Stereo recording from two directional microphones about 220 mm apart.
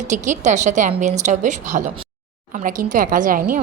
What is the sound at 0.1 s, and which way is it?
A woman's voice, 35° right (ahead or behind).